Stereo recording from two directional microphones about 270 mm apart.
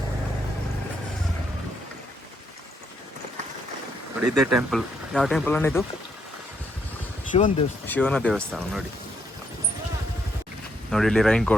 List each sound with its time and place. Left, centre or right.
4.2 s speech: centre
7.3 s speech: left
7.9 s speech: centre
10.9 s speech: centre